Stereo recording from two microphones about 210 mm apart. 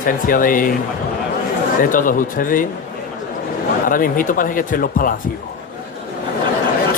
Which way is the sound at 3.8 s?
40° left (ahead or behind).